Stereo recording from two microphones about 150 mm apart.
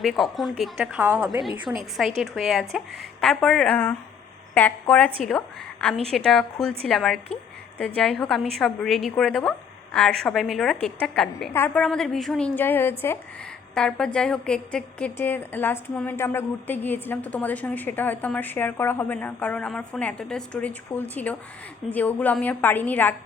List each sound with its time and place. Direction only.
0.0 s a woman's voice: centre (ahead or behind)
0.9 s a woman's voice: 10° right (ahead or behind)
12.5 s a woman's voice: 15° left (ahead or behind)